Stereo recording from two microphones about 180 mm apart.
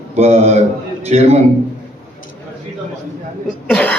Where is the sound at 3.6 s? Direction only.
5° left (ahead or behind).